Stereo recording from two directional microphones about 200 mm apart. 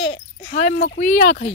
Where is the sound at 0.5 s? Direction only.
40° left (ahead or behind).